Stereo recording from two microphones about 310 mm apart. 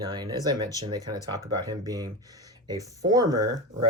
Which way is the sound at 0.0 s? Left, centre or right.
Centre.